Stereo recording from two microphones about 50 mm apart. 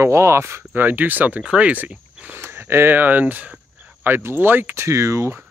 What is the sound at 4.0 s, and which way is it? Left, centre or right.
Speech, right.